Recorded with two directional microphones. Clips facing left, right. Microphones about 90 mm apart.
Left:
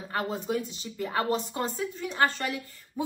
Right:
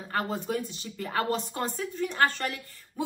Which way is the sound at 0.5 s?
15° left (ahead or behind).